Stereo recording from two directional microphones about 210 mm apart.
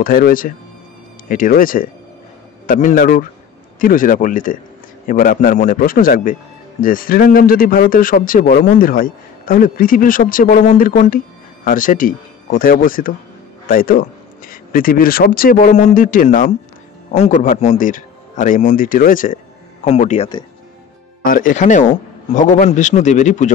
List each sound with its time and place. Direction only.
0.0 s a man's voice: 45° left (ahead or behind)